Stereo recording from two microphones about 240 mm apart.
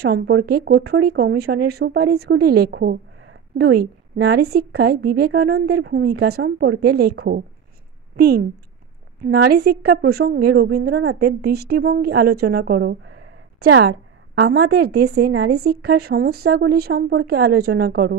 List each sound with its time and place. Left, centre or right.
0.0 s a woman's voice: right